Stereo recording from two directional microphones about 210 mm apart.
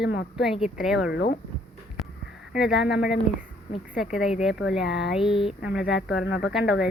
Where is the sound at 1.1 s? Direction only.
55° left (ahead or behind).